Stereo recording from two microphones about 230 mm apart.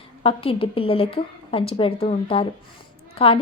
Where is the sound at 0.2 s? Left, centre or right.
Left.